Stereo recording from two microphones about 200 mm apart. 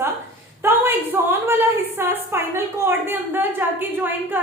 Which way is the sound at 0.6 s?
10° right (ahead or behind).